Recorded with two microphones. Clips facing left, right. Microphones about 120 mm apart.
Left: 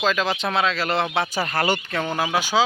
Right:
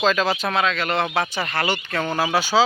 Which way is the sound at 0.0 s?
10° left (ahead or behind).